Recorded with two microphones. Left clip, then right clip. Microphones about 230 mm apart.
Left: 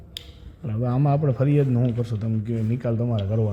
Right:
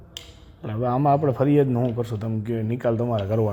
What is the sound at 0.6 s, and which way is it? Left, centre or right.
A man's voice, right.